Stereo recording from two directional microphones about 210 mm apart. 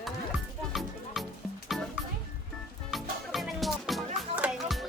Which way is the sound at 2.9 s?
Centre (ahead or behind).